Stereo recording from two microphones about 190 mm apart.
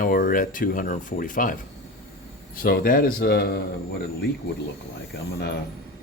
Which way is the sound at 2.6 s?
50° left (ahead or behind).